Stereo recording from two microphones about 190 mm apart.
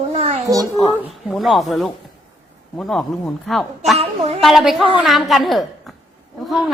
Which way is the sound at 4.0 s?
30° right (ahead or behind).